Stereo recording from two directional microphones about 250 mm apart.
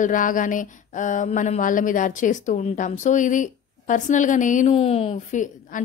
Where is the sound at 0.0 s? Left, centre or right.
Left.